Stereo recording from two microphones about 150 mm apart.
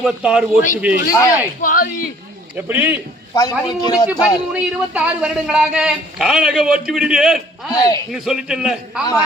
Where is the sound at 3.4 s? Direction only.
25° left (ahead or behind).